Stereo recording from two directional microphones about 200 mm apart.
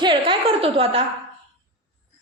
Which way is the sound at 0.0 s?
25° right (ahead or behind).